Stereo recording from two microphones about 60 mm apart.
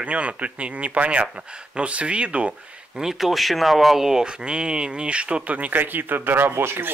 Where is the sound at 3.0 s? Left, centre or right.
Centre.